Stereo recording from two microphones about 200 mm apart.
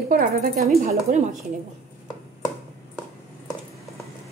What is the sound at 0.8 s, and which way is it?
Speech, 35° right (ahead or behind).